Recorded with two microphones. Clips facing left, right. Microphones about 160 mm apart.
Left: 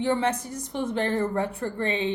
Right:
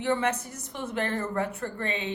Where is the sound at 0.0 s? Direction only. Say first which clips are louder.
Left 2 dB; 35° left (ahead or behind).